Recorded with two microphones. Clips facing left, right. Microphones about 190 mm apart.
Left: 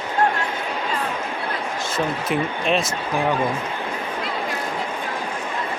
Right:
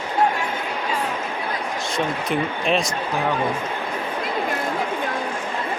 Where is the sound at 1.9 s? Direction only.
Centre (ahead or behind).